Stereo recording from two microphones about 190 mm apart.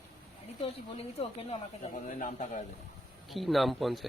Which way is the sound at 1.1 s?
35° left (ahead or behind).